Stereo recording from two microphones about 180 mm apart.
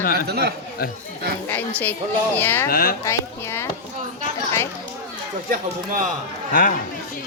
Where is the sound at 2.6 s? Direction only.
55° left (ahead or behind).